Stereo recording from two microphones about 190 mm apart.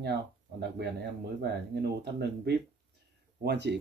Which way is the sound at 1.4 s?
60° right (ahead or behind).